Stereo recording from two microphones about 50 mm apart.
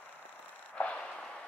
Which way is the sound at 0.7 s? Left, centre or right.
Left.